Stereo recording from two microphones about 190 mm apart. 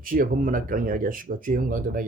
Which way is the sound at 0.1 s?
45° right (ahead or behind).